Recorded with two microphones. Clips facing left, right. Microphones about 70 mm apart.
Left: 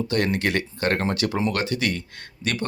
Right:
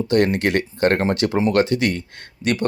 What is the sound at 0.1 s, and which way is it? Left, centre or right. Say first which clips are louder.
Speech: right 7 dB; right.